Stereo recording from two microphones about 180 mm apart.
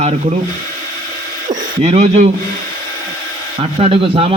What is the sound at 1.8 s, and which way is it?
Speech, 35° right (ahead or behind).